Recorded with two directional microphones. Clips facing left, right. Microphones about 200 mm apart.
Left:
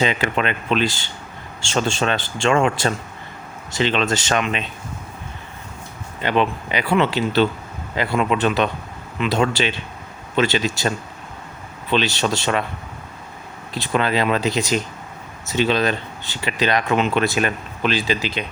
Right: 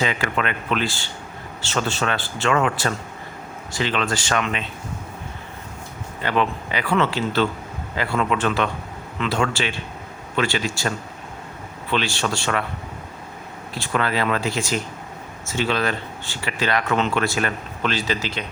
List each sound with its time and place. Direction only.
0.0 s speech: 20° left (ahead or behind)
6.2 s speech: 20° left (ahead or behind)
11.9 s speech: 20° left (ahead or behind)
13.7 s speech: 20° left (ahead or behind)